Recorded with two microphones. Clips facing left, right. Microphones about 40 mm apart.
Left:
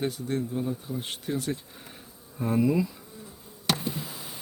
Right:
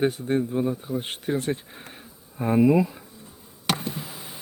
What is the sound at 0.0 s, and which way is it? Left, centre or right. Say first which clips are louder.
Speech: right 6 dB; right.